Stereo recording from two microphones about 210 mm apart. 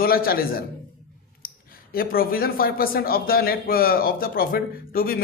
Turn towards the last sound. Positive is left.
turn(degrees=45)  # may be behind; listen again after turning